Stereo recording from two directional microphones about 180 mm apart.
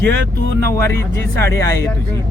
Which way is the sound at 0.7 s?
15° left (ahead or behind).